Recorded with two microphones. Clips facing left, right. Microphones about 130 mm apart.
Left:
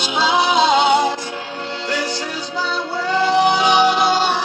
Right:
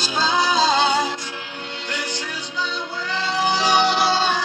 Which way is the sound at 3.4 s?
15° left (ahead or behind).